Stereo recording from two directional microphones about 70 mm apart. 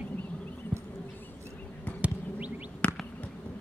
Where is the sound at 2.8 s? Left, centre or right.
Centre.